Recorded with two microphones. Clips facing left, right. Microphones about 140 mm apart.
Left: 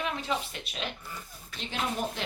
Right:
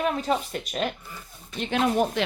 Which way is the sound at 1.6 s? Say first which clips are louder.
Right 9 dB; 65° right (ahead or behind).